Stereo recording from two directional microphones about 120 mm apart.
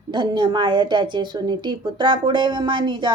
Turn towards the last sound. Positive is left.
turn(degrees=-40)  # may be behind; listen again after turning